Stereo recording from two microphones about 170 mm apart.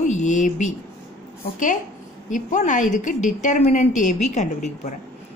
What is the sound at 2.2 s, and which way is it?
A woman's voice, 45° left (ahead or behind).